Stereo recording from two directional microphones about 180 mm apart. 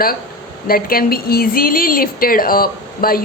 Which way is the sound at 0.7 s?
55° left (ahead or behind).